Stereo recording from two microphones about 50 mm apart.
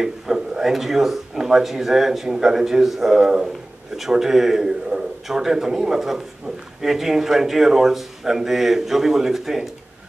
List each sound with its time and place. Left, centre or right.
0.0 s speech: centre